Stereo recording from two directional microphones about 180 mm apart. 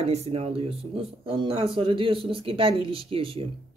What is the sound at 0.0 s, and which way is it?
Speech, 35° right (ahead or behind).